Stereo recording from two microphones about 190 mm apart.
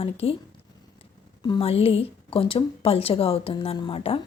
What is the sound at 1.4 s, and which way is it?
A woman's voice, 25° left (ahead or behind).